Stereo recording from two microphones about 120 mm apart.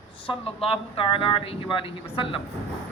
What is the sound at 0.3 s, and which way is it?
A man's voice, 50° left (ahead or behind).